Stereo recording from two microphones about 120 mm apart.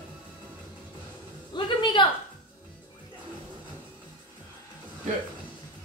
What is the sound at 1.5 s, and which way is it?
Speech, 40° left (ahead or behind).